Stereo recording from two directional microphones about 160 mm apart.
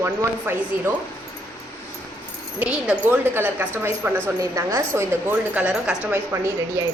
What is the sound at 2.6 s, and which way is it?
A woman's voice, 10° right (ahead or behind).